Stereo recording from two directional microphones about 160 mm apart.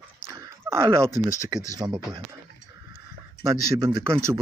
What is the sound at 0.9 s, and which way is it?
Speech, 20° right (ahead or behind).